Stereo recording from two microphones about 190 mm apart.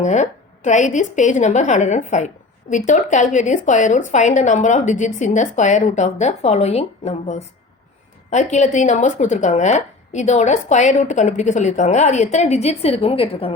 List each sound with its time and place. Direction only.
0.0 s a woman's voice: 40° left (ahead or behind)